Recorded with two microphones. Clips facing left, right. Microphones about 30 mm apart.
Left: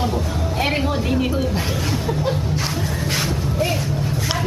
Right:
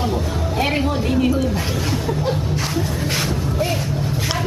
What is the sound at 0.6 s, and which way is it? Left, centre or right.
Speech, centre.